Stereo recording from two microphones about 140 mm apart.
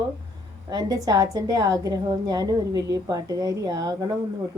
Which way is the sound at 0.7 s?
30° right (ahead or behind).